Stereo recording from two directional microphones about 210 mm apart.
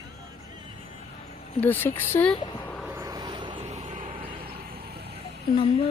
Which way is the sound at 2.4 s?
20° left (ahead or behind).